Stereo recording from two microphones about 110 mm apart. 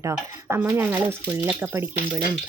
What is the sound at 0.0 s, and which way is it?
Speech, 25° right (ahead or behind).